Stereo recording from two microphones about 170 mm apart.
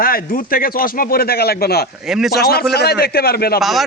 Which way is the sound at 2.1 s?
Centre (ahead or behind).